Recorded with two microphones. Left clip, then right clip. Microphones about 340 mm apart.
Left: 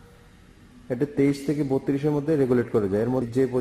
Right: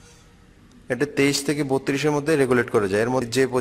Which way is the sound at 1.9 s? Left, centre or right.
Right.